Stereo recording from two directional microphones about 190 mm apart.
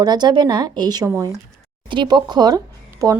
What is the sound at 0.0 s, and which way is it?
Speech, 20° right (ahead or behind).